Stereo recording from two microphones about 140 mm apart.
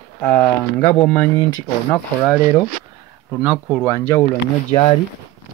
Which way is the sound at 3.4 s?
5° right (ahead or behind).